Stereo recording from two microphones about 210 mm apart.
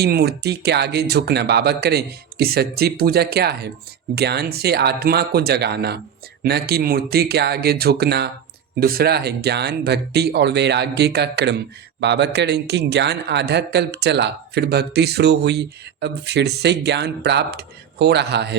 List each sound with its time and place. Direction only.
0.0 s speech: 50° right (ahead or behind)